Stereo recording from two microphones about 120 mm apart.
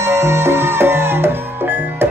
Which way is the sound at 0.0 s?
25° right (ahead or behind).